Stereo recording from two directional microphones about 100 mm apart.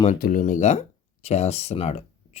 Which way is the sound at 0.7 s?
90° left.